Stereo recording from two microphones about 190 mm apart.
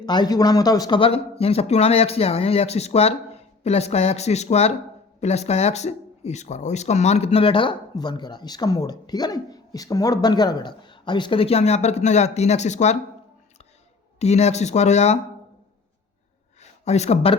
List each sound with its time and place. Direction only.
0.0 s speech: 20° left (ahead or behind)
14.2 s speech: 35° left (ahead or behind)
16.6 s a sound: 35° left (ahead or behind)